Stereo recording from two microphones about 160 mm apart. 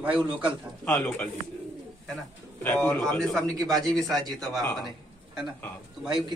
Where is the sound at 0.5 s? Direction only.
5° left (ahead or behind).